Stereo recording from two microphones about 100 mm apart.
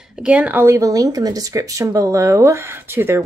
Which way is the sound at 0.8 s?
35° right (ahead or behind).